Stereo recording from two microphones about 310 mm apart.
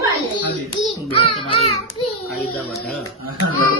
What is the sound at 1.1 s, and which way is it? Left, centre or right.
Music, centre.